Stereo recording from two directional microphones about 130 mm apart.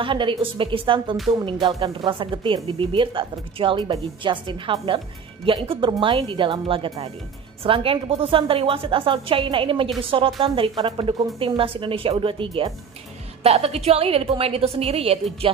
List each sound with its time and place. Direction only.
0.0 s a woman's voice: 40° right (ahead or behind)